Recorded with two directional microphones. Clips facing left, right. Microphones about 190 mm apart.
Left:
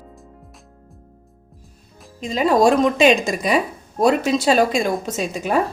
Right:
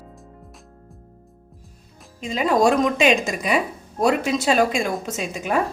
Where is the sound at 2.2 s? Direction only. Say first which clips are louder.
Left 3 dB; 35° left (ahead or behind).